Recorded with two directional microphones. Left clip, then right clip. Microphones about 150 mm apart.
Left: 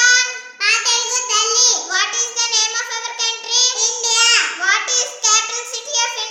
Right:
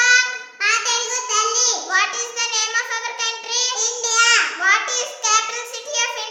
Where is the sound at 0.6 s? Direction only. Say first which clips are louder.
Left 3 dB; 10° left (ahead or behind).